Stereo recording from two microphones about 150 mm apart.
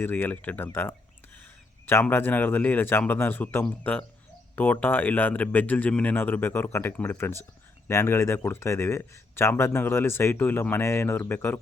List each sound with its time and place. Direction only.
0.0 s speech: 15° left (ahead or behind)